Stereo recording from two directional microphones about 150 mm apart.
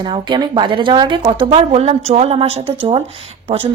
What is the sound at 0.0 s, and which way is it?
Speech, 30° right (ahead or behind).